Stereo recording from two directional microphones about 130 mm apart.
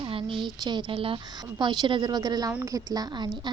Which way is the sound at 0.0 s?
40° right (ahead or behind).